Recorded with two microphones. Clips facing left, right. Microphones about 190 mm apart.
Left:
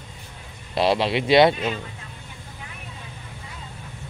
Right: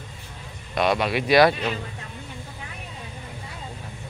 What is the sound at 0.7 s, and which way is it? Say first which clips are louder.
Speech: left 2 dB; 30° left (ahead or behind).